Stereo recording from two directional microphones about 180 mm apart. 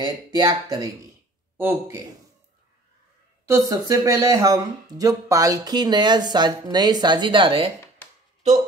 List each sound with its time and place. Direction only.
0.0 s a man's voice: 20° right (ahead or behind)
3.4 s speech: 20° right (ahead or behind)